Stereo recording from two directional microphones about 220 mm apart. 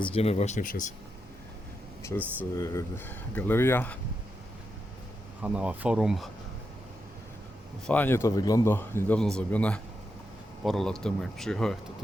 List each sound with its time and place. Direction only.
0.0 s speech: 25° left (ahead or behind)
2.0 s speech: 10° left (ahead or behind)
5.4 s speech: 5° right (ahead or behind)
7.9 s speech: 10° left (ahead or behind)